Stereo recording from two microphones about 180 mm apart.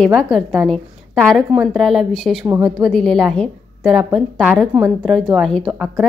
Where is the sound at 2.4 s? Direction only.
15° right (ahead or behind).